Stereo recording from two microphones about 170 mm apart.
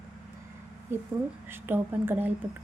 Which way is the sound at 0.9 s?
15° right (ahead or behind).